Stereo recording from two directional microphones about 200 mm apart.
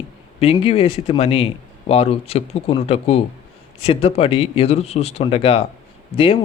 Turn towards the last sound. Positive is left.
turn(degrees=25)  # may be behind; listen again after turning